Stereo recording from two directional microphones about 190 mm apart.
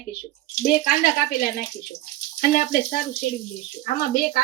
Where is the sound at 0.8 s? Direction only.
50° left (ahead or behind).